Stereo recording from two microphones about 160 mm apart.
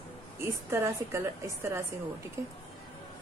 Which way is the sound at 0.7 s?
15° right (ahead or behind).